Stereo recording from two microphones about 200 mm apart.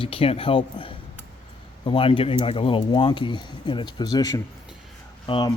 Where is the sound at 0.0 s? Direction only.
25° left (ahead or behind).